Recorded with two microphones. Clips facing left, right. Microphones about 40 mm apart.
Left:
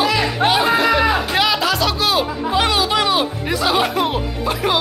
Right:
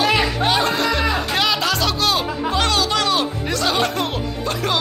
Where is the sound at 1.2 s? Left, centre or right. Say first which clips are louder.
Left 2 dB; centre.